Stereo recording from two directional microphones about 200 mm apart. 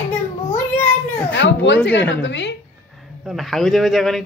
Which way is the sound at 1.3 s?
65° left (ahead or behind).